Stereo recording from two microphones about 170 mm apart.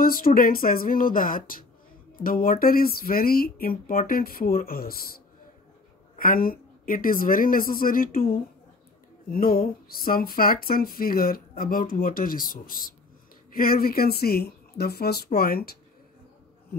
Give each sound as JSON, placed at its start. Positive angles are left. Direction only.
{"t": 0.0, "sound": "speech", "side_deg": 55}
{"t": 6.1, "sound": "speech", "side_deg": 55}